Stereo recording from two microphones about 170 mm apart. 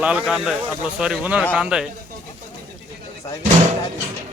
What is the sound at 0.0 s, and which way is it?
Speech, 5° right (ahead or behind).